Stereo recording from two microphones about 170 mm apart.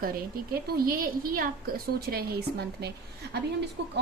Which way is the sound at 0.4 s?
60° right (ahead or behind).